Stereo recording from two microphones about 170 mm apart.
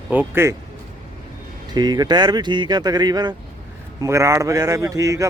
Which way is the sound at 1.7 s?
25° right (ahead or behind).